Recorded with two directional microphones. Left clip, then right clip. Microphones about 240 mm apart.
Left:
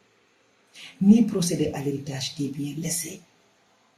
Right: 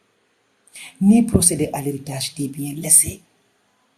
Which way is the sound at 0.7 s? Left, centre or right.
Right.